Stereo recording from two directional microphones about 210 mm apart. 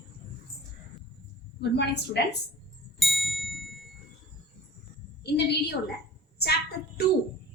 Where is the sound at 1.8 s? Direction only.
55° left (ahead or behind).